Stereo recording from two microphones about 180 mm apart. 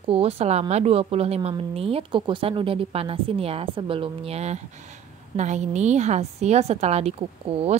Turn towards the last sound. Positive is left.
turn(degrees=-35)  # may be behind; listen again after turning